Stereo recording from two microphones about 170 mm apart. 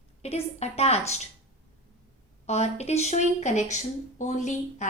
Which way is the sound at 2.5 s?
40° left (ahead or behind).